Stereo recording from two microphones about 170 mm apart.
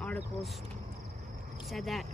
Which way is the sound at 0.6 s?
40° right (ahead or behind).